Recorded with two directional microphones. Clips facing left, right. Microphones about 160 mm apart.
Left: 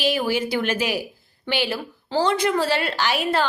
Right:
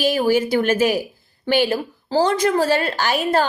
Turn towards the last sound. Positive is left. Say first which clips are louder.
# right 3 dB
turn(degrees=-45)  # may be behind; listen again after turning